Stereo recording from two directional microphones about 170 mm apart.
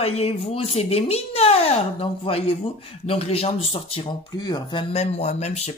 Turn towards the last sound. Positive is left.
turn(degrees=40)  # may be behind; listen again after turning